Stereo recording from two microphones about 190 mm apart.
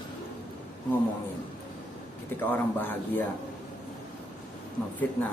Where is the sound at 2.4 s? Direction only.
10° left (ahead or behind).